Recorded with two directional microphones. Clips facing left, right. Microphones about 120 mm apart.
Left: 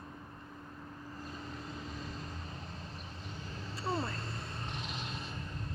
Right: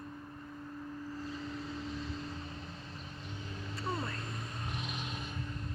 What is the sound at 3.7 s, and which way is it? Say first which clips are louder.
Vehicle: left 2 dB; 30° left (ahead or behind).